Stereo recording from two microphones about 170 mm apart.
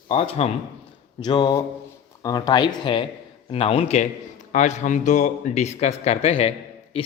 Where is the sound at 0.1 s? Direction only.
35° left (ahead or behind).